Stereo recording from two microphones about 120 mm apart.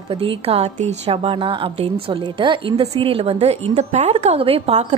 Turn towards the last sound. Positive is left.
turn(degrees=-55)  # may be behind; listen again after turning